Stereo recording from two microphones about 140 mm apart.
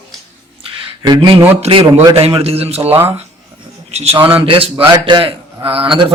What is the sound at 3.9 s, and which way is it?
Speech, 50° right (ahead or behind).